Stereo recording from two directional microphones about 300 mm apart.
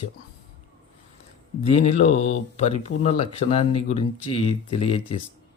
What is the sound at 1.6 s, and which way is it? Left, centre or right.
Speech, left.